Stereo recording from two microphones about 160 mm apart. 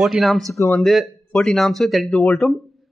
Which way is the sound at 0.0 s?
Centre (ahead or behind).